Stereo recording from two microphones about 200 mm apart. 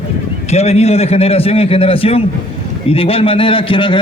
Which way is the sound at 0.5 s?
30° left (ahead or behind).